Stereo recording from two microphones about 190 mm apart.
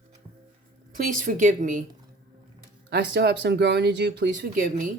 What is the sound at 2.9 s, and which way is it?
Speech, 65° right (ahead or behind).